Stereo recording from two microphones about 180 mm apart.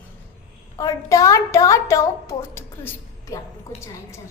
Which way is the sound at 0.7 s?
20° left (ahead or behind).